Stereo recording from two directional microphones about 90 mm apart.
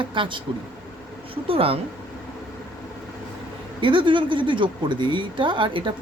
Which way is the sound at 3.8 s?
65° right (ahead or behind).